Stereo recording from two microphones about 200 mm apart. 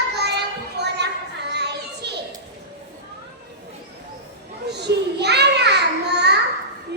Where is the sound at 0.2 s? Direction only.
55° right (ahead or behind).